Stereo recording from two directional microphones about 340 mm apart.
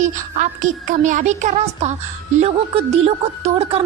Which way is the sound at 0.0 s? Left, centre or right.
Right.